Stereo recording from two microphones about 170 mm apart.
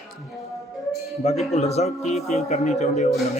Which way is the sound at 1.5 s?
40° left (ahead or behind).